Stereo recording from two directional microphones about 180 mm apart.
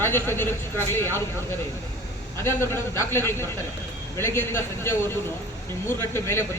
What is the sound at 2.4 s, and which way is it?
A man's voice, 15° left (ahead or behind).